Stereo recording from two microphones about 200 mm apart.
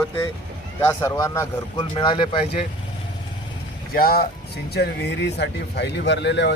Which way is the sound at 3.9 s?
50° left (ahead or behind).